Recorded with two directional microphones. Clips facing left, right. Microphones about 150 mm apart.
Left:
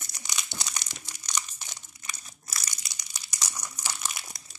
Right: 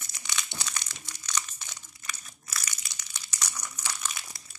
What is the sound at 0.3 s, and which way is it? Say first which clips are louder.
Crumpling: even; 15° left (ahead or behind).